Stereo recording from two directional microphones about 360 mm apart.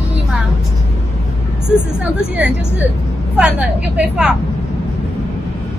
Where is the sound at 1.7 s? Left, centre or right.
Centre.